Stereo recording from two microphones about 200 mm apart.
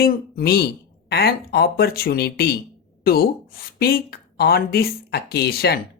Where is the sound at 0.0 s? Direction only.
50° left (ahead or behind).